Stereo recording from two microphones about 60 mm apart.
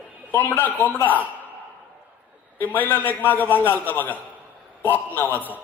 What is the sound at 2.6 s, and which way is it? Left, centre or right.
A man's voice, left.